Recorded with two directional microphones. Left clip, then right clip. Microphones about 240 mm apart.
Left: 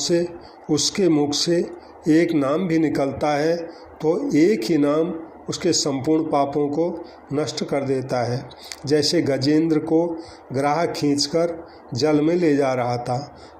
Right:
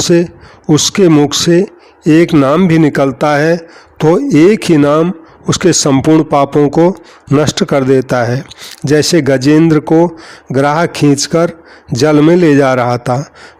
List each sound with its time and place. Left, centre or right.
0.0 s a man's voice: right